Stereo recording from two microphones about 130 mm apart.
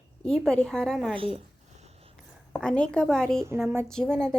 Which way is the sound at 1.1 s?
50° right (ahead or behind).